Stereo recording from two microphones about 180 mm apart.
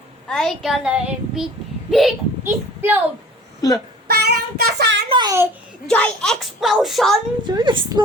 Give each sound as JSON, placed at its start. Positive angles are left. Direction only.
{"t": 0.3, "sound": "a child's voice", "side_deg": 0}
{"t": 2.4, "sound": "speech", "side_deg": -10}
{"t": 4.1, "sound": "child singing", "side_deg": -65}
{"t": 5.0, "sound": "a woman's voice", "side_deg": -25}
{"t": 5.9, "sound": "a child's voice", "side_deg": 5}
{"t": 7.4, "sound": "a woman's voice", "side_deg": -25}